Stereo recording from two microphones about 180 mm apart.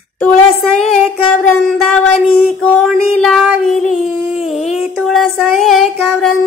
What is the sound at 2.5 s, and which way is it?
Child singing, 5° left (ahead or behind).